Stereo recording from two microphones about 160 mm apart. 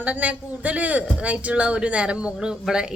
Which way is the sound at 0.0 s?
10° right (ahead or behind).